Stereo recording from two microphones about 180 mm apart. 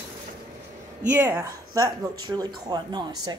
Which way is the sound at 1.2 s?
15° right (ahead or behind).